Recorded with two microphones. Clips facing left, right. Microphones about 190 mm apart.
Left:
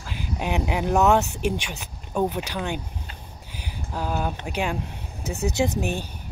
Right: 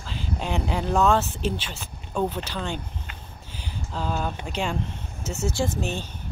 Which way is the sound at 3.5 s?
10° left (ahead or behind).